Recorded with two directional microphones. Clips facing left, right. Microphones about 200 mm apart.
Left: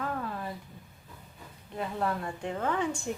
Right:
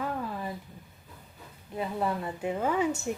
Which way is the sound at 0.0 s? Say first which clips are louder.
Right 1 dB; 5° right (ahead or behind).